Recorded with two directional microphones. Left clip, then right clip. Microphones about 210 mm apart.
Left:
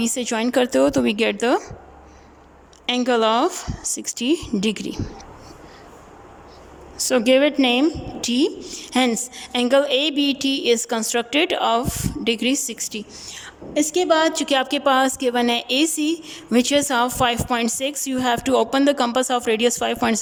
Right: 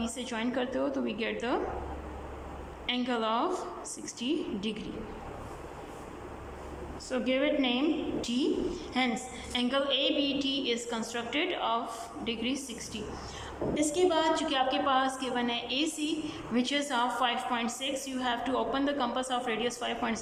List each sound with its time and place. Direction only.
0.0 s a woman's voice: 55° left (ahead or behind)
2.8 s a woman's voice: 50° left (ahead or behind)
7.0 s a woman's voice: 50° left (ahead or behind)